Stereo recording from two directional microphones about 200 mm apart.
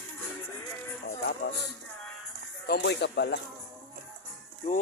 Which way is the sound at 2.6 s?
55° left (ahead or behind).